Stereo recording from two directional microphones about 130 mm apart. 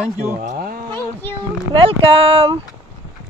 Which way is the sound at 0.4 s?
90° right.